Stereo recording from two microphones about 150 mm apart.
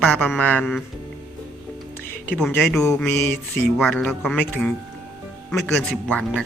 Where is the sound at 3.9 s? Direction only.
5° left (ahead or behind).